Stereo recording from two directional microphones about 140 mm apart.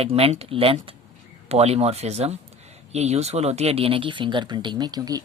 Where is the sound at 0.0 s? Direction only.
45° right (ahead or behind).